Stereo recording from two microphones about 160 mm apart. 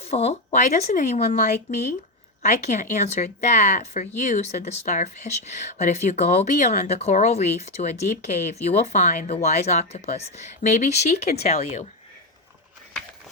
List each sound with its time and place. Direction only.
0.0 s speech: 40° left (ahead or behind)